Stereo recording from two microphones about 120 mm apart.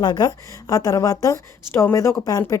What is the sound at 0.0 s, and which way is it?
A woman's voice, 35° left (ahead or behind).